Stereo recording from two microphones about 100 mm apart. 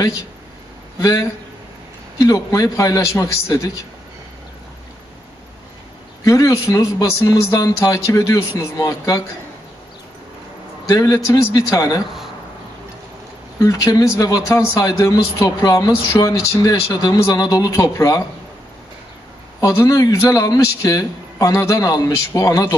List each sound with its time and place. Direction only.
2.2 s a man's voice: 35° left (ahead or behind)
6.2 s a man's voice: 35° left (ahead or behind)
10.9 s a man's voice: 35° left (ahead or behind)
13.6 s a man's voice: 35° left (ahead or behind)
19.6 s a man's voice: 30° left (ahead or behind)